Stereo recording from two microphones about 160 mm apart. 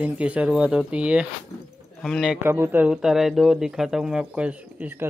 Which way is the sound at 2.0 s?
5° left (ahead or behind).